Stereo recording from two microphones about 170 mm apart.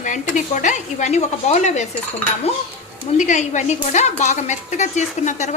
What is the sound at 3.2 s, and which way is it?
A woman's voice, 45° left (ahead or behind).